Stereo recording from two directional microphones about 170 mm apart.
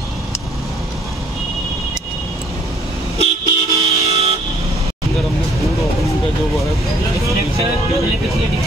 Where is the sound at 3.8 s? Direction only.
35° right (ahead or behind).